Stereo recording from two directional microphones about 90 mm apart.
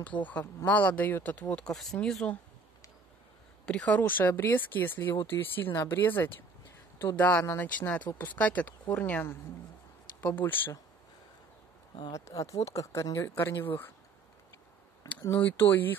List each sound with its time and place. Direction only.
0.0 s speech: 15° left (ahead or behind)
3.6 s speech: 10° left (ahead or behind)
12.1 s speech: 35° left (ahead or behind)
13.3 s speech: 25° left (ahead or behind)
15.3 s speech: 20° left (ahead or behind)